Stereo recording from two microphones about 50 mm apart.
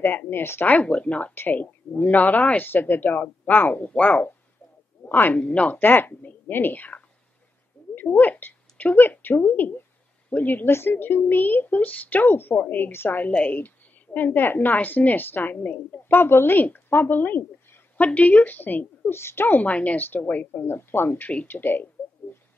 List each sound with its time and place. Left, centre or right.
0.0 s speech: left
0.7 s speech: left
1.3 s a woman's voice: left
5.4 s speech: left
5.7 s a woman's voice: left
8.1 s a woman's voice: left
10.7 s a woman's voice: left
19.1 s speech: left
19.6 s a woman's voice: left
20.6 s a woman's voice: left